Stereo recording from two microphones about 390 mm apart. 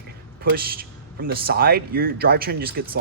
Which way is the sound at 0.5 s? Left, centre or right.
Right.